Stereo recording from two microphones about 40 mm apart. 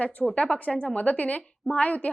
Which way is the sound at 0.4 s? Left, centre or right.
Left.